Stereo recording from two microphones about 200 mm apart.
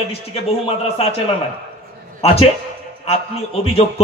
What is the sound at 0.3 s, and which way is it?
Speech, 30° left (ahead or behind).